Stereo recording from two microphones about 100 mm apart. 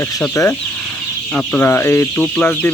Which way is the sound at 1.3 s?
20° left (ahead or behind).